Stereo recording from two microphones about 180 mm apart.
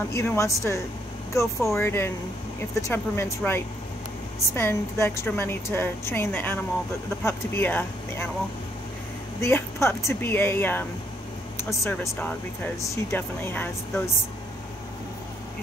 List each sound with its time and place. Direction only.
0.1 s speech: 15° left (ahead or behind)
9.4 s speech: 15° left (ahead or behind)
12.0 s speech: 10° left (ahead or behind)